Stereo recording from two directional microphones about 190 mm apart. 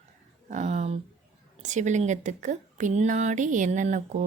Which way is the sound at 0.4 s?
40° right (ahead or behind).